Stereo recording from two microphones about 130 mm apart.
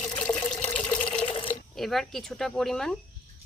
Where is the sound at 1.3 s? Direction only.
40° left (ahead or behind).